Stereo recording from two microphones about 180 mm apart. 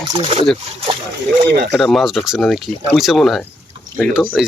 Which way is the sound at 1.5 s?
65° right (ahead or behind).